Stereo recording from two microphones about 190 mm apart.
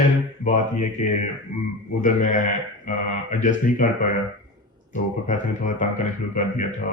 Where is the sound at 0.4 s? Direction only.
40° left (ahead or behind).